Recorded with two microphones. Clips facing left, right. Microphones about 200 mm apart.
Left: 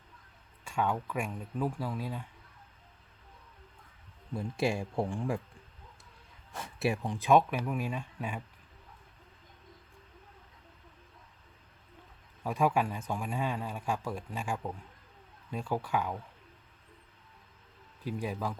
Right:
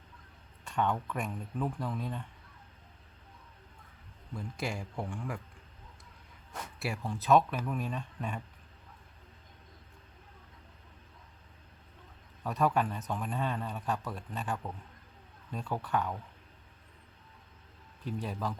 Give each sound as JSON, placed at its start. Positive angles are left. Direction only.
{"t": 0.6, "sound": "a man's voice", "side_deg": 10}
{"t": 4.4, "sound": "speech", "side_deg": 25}
{"t": 6.7, "sound": "a man's voice", "side_deg": 20}
{"t": 12.4, "sound": "a man's voice", "side_deg": 10}
{"t": 18.0, "sound": "a man's voice", "side_deg": 10}